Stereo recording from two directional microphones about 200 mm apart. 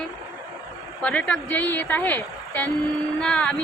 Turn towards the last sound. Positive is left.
turn(degrees=5)  # may be behind; listen again after turning